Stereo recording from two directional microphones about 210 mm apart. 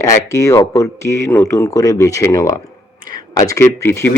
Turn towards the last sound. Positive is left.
turn(degrees=10)  # may be behind; listen again after turning